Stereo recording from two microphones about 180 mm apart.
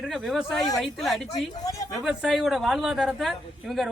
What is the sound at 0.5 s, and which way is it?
Speech, 20° left (ahead or behind).